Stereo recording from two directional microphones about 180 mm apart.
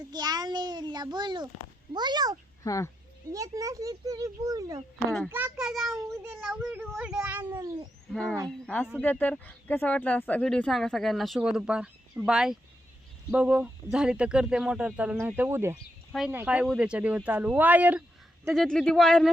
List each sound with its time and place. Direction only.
0.1 s a sound: 20° right (ahead or behind)
1.9 s speech: 25° right (ahead or behind)
2.6 s speech: 15° left (ahead or behind)
3.3 s speech: 20° right (ahead or behind)
5.3 s speech: 5° right (ahead or behind)
8.1 s speech: 5° left (ahead or behind)
18.5 s speech: centre (ahead or behind)